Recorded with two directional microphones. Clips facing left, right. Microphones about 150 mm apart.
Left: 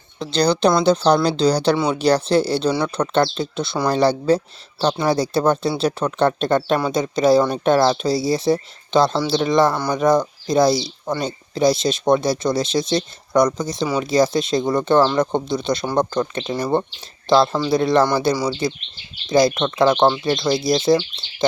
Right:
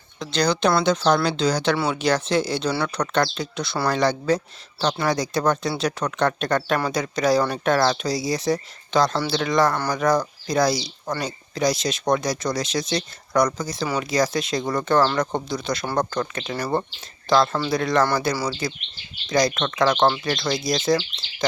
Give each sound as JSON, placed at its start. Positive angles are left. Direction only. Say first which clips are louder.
{"t": 0.2, "sound": "speech", "louder": "left 4 dB", "side_deg": 30}
{"t": 17.2, "sound": "speech", "louder": "left 4 dB", "side_deg": 25}